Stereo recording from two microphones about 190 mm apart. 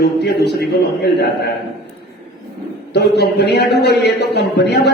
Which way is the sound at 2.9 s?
60° left (ahead or behind).